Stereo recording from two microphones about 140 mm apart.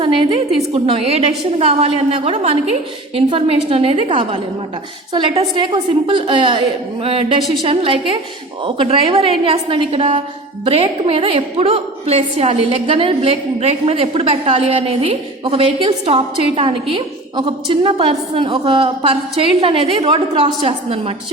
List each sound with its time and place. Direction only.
0.0 s a woman's voice: 40° right (ahead or behind)